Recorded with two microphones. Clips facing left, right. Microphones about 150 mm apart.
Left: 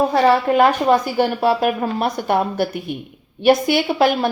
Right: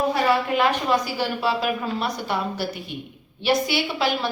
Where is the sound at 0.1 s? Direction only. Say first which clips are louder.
Left 6 dB; 50° left (ahead or behind).